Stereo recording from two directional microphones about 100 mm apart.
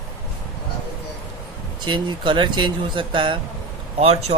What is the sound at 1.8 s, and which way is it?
Speech, 50° right (ahead or behind).